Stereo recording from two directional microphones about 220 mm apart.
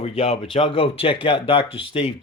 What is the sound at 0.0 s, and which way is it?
Speech, 25° left (ahead or behind).